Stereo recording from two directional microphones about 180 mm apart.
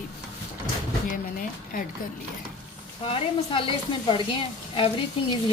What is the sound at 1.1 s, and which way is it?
Speech, 50° left (ahead or behind).